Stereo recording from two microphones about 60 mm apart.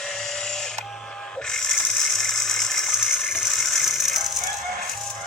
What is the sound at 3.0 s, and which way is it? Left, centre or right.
Engine, centre.